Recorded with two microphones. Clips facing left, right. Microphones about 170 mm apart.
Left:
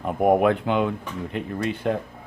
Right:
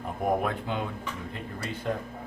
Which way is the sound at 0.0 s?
65° left (ahead or behind).